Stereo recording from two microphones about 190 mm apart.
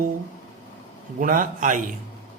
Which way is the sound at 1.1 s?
45° right (ahead or behind).